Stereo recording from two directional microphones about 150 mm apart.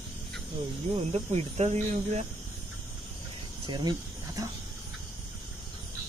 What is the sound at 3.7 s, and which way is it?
Speech, 30° right (ahead or behind).